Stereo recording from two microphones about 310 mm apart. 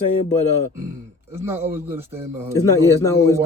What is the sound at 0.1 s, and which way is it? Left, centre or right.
Speech, left.